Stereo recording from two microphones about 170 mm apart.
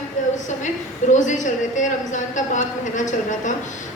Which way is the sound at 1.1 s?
45° left (ahead or behind).